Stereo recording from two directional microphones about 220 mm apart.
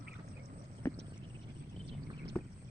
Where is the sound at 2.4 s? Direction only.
10° left (ahead or behind).